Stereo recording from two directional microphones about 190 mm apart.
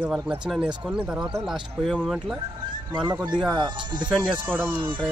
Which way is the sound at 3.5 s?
25° right (ahead or behind).